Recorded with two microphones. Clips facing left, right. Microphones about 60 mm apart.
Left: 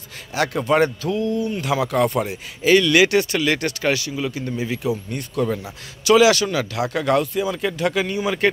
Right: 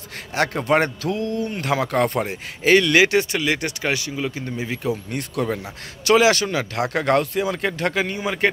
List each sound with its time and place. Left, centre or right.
0.3 s a man's voice: right
4.8 s speech: right
6.1 s speech: right
6.7 s a man's voice: right
7.9 s a man's voice: right